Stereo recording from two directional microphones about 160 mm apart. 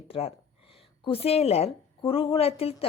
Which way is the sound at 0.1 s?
35° left (ahead or behind).